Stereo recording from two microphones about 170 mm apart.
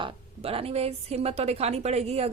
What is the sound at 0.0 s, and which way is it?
Speech, 35° right (ahead or behind).